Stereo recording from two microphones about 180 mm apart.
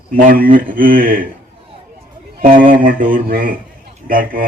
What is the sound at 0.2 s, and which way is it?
Speech, 50° right (ahead or behind).